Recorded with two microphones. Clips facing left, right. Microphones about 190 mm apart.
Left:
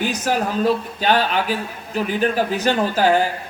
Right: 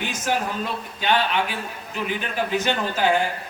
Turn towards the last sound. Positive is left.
turn(degrees=40)  # may be behind; listen again after turning